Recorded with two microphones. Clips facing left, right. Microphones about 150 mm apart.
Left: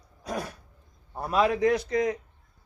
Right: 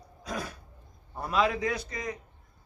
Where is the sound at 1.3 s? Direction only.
45° left (ahead or behind); by 2.2 s 75° left (ahead or behind).